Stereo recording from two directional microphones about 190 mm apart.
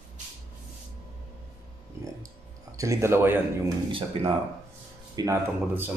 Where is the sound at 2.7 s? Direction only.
15° right (ahead or behind).